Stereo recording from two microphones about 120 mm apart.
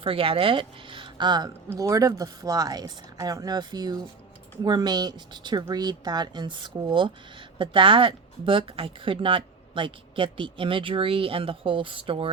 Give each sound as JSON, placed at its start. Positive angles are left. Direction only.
{"t": 0.0, "sound": "speech", "side_deg": -50}
{"t": 1.7, "sound": "speech", "side_deg": -25}